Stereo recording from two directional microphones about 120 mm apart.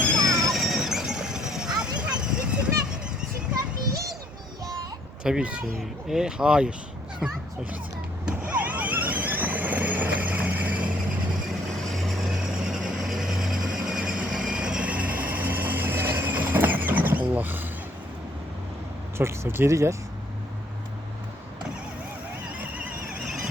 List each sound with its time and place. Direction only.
0.0 s a sound: 5° left (ahead or behind)
5.2 s speech: 5° right (ahead or behind)
8.2 s vehicle: 10° right (ahead or behind)
11.8 s vehicle: centre (ahead or behind); by 17.7 s 15° right (ahead or behind)
19.1 s speech: 20° right (ahead or behind)